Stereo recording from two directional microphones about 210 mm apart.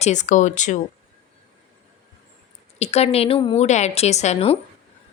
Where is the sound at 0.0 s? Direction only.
35° left (ahead or behind).